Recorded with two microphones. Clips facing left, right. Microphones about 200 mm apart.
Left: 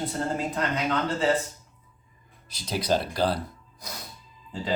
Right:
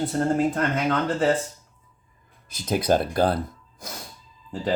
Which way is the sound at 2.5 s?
50° right (ahead or behind).